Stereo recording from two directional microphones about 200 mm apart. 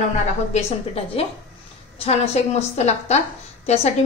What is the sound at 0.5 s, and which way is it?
A woman's voice, 30° left (ahead or behind).